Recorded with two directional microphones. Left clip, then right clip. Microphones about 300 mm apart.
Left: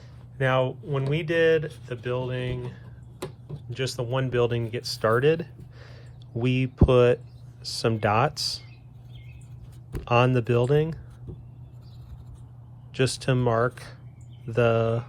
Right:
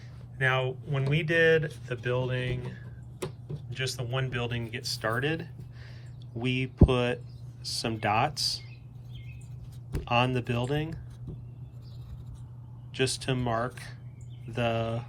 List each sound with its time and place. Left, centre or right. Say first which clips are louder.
0.3 s speech: left 4 dB; centre
10.0 s speech: left 5 dB; left
12.9 s speech: left 4 dB; left